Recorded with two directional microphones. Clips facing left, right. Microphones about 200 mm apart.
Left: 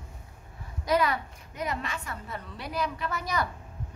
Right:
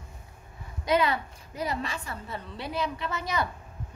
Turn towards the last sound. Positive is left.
turn(degrees=-25)  # may be behind; listen again after turning